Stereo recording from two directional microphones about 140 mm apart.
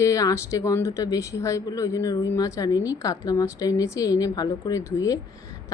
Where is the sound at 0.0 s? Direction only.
25° left (ahead or behind).